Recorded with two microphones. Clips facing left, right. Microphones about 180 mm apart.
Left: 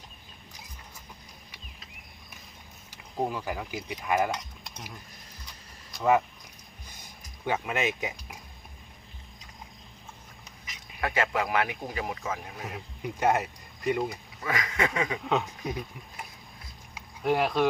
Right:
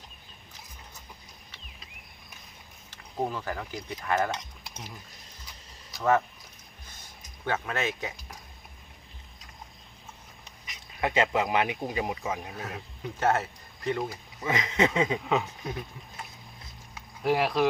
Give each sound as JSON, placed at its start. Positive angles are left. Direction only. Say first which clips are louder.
{"t": 2.9, "sound": "speech", "louder": "left 1 dB", "side_deg": 10}
{"t": 5.9, "sound": "speech", "louder": "left 1 dB", "side_deg": 10}
{"t": 6.8, "sound": "a sound", "louder": "left 1 dB", "side_deg": 15}
{"t": 11.0, "sound": "speech", "louder": "right 2 dB", "side_deg": -20}
{"t": 12.5, "sound": "speech", "louder": "right 1 dB", "side_deg": 15}
{"t": 14.4, "sound": "speech", "louder": "right 3 dB", "side_deg": -20}
{"t": 15.2, "sound": "speech", "louder": "even", "side_deg": 0}
{"t": 15.6, "sound": "speech", "louder": "left 2 dB", "side_deg": 15}
{"t": 17.2, "sound": "speech", "louder": "even", "side_deg": 0}